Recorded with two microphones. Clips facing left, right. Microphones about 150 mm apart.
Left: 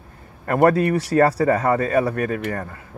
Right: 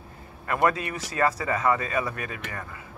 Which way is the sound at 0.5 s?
45° left (ahead or behind).